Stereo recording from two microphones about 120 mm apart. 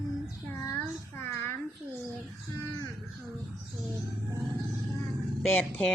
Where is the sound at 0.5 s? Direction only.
20° left (ahead or behind).